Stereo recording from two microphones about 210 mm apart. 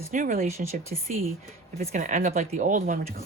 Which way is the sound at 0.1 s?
40° right (ahead or behind).